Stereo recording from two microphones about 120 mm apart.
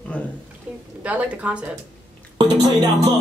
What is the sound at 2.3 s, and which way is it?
Speech, 35° right (ahead or behind).